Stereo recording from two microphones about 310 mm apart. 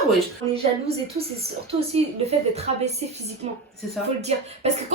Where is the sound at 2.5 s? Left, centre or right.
Right.